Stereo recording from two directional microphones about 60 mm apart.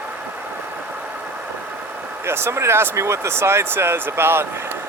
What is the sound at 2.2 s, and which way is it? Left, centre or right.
Speech, right.